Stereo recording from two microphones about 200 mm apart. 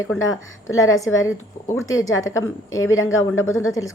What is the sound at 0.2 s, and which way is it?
Speech, 85° left.